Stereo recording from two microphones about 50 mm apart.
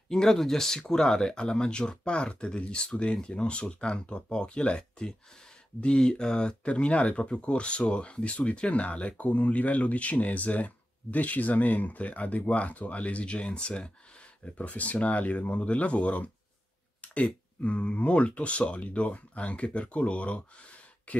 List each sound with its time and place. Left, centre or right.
0.1 s speech: centre; by 21.2 s left